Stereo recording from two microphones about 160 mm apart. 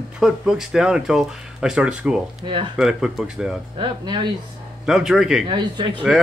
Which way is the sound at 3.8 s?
30° right (ahead or behind).